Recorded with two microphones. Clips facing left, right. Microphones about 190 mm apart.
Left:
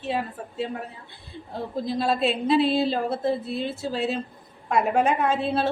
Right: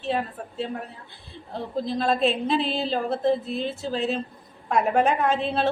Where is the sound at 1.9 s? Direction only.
5° left (ahead or behind).